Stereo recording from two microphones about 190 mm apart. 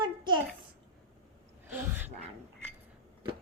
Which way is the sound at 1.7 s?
10° right (ahead or behind).